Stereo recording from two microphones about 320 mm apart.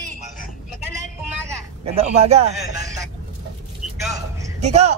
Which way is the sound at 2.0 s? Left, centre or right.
Centre.